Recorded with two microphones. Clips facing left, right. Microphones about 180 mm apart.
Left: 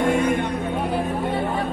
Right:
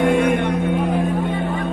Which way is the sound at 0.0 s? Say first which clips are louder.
Right 3 dB; 60° right (ahead or behind).